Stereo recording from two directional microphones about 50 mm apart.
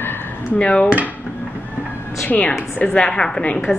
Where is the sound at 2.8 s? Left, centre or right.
Centre.